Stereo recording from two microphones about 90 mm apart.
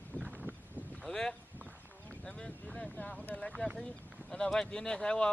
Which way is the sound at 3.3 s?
10° left (ahead or behind).